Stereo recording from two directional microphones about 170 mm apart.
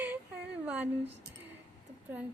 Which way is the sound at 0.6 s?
10° right (ahead or behind).